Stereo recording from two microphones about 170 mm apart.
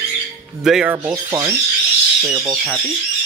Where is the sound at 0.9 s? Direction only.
15° right (ahead or behind).